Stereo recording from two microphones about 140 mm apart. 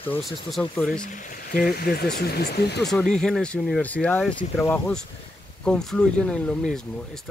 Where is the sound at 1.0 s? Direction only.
70° left (ahead or behind); by 2.1 s 90° left.